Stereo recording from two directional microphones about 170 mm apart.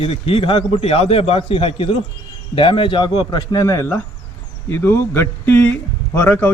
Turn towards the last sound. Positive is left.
turn(degrees=10)  # may be behind; listen again after turning